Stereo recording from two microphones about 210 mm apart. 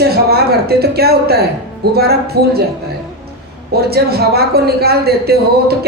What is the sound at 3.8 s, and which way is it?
Speech, 50° right (ahead or behind).